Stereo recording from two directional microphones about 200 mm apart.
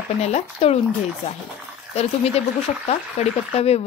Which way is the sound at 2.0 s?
30° left (ahead or behind).